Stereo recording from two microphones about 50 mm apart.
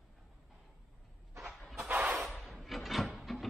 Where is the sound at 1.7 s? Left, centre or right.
Right.